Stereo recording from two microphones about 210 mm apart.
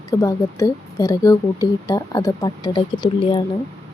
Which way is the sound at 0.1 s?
15° left (ahead or behind).